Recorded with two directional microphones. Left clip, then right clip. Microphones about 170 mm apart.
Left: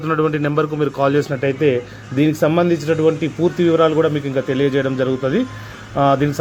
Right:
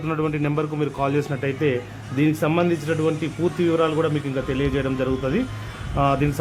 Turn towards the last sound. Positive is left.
turn(degrees=25)  # may be behind; listen again after turning